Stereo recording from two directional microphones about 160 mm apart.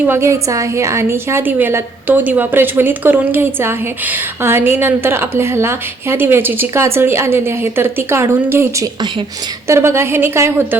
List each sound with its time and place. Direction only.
0.1 s a woman's voice: 15° right (ahead or behind)